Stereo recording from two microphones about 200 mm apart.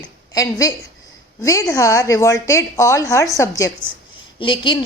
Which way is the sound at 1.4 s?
15° left (ahead or behind).